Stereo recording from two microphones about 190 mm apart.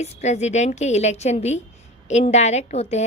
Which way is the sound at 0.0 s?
35° left (ahead or behind).